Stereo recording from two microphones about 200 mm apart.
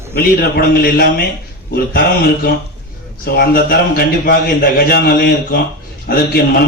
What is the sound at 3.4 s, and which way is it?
A man's voice, 50° left (ahead or behind).